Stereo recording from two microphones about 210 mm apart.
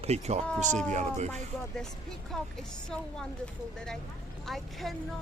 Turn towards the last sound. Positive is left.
turn(degrees=0)  # may be behind; listen again after turning